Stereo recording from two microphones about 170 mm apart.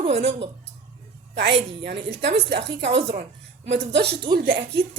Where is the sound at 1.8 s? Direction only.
75° right (ahead or behind).